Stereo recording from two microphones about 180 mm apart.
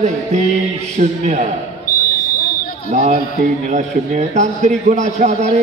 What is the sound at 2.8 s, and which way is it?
A man's voice, 40° right (ahead or behind).